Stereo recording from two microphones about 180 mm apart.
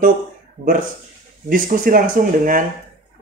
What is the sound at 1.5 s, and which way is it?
Speech, 50° right (ahead or behind).